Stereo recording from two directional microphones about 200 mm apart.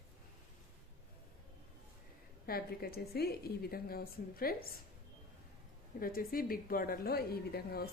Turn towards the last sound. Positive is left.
turn(degrees=50)  # may be behind; listen again after turning